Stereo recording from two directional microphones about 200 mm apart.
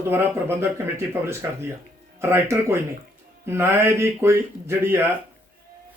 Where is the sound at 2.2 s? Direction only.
10° right (ahead or behind).